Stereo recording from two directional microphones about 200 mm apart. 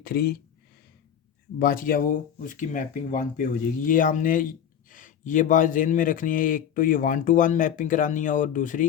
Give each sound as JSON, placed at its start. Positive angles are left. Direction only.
{"t": 0.0, "sound": "speech", "side_deg": 50}
{"t": 1.5, "sound": "speech", "side_deg": 45}